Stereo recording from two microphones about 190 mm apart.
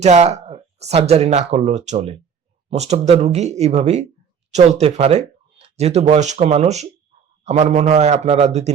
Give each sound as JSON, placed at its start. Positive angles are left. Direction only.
{"t": 0.0, "sound": "speech", "side_deg": -35}